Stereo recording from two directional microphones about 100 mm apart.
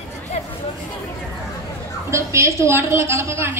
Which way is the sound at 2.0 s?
30° right (ahead or behind).